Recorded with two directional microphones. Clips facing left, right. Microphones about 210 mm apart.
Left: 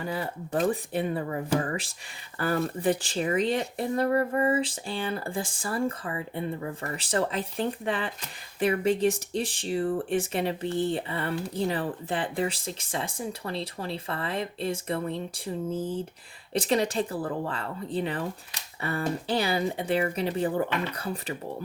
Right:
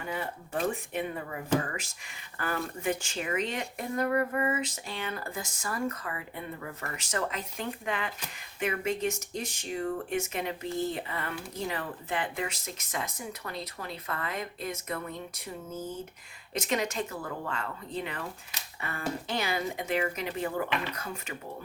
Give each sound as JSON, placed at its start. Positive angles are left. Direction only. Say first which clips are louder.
{"t": 0.0, "sound": "speech", "louder": "left 4 dB", "side_deg": 35}